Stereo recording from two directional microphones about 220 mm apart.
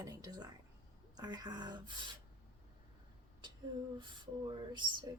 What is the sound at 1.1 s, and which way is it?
Speech, 20° right (ahead or behind).